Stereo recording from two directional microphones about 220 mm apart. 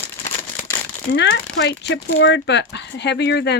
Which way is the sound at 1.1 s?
50° left (ahead or behind).